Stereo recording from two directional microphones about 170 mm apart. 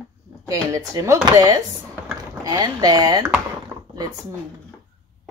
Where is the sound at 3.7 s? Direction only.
15° right (ahead or behind).